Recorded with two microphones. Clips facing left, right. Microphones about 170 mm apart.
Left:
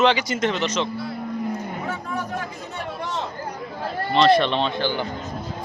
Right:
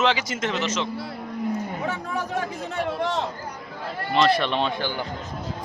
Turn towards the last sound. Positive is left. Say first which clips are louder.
# left 2 dB
turn(degrees=-10)  # may be behind; listen again after turning